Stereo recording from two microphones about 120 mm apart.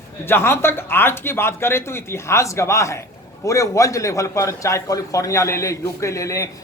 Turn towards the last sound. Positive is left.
turn(degrees=25)  # may be behind; listen again after turning